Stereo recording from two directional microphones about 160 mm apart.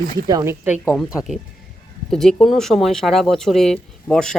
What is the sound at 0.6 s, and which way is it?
Speech, 10° right (ahead or behind).